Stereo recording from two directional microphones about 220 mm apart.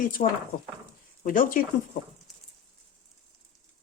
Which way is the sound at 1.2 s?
40° left (ahead or behind).